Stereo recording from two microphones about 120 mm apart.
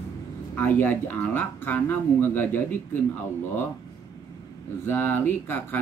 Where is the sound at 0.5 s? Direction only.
15° left (ahead or behind).